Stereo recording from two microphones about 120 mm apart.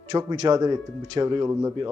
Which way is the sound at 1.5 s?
25° right (ahead or behind).